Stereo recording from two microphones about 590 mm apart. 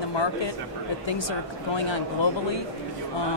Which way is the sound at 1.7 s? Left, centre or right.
Left.